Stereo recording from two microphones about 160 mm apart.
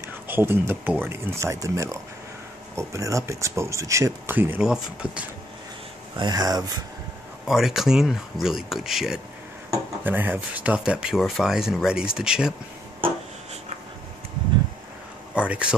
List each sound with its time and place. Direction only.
0.3 s speech: 15° right (ahead or behind)
6.1 s speech: 25° right (ahead or behind)
7.4 s speech: centre (ahead or behind)
15.3 s speech: 5° right (ahead or behind)